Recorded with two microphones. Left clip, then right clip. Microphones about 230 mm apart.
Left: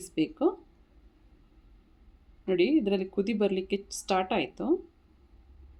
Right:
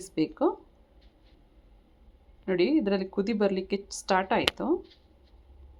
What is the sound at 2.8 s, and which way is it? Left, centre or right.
A woman's voice, centre.